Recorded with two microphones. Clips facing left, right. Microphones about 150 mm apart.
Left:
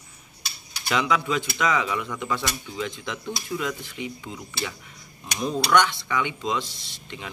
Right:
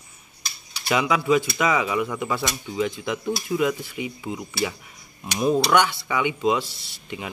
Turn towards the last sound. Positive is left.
turn(degrees=-10)  # may be behind; listen again after turning